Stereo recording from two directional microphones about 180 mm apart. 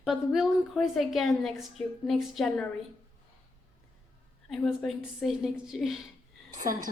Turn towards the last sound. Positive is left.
turn(degrees=-45)  # may be behind; listen again after turning